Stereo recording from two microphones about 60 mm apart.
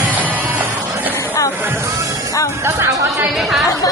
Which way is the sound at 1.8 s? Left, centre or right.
Right.